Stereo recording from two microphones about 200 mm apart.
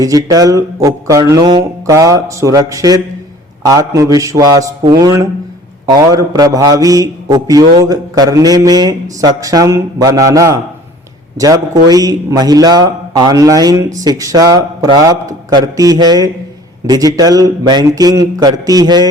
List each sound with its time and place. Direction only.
0.0 s a man's voice: 15° right (ahead or behind)